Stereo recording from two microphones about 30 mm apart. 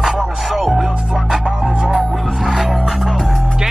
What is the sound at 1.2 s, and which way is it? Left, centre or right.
Music, right.